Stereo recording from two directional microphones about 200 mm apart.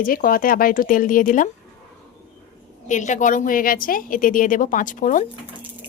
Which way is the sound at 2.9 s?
40° left (ahead or behind).